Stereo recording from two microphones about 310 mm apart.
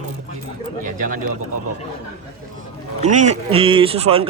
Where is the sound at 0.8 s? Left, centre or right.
Right.